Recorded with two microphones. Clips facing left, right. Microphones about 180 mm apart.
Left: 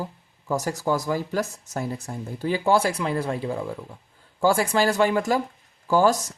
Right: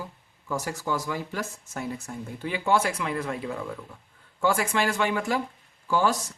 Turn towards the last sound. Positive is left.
turn(degrees=40)  # may be behind; listen again after turning